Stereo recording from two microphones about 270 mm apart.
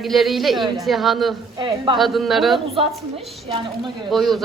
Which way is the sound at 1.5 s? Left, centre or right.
Centre.